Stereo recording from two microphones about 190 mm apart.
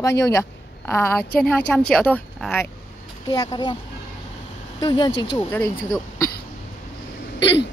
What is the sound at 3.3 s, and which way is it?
Speech, 20° left (ahead or behind).